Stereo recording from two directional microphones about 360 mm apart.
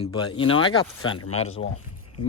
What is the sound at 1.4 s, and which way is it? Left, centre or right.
Speech, centre.